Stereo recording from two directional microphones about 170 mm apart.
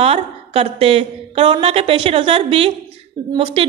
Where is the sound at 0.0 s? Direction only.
35° right (ahead or behind).